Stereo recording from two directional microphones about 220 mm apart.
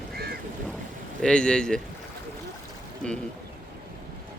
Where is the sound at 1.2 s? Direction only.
5° left (ahead or behind).